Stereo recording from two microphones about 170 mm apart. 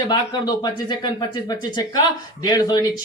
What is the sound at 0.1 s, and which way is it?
Speech, 25° left (ahead or behind).